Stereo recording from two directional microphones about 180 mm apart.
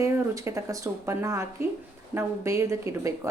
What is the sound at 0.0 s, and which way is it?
A woman's voice, 15° right (ahead or behind).